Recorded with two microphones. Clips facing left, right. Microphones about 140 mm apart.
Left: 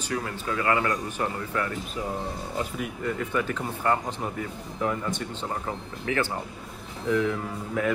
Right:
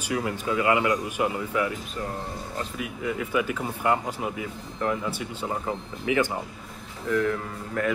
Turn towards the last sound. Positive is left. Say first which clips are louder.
# left 1 dB
turn(degrees=5)  # may be behind; listen again after turning